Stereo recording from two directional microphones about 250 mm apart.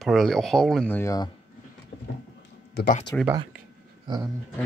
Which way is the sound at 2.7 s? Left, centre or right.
Left.